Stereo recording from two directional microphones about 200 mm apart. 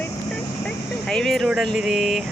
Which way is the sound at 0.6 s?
5° left (ahead or behind).